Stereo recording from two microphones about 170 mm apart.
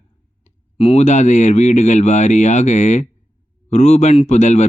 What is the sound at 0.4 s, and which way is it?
Speech, 40° left (ahead or behind).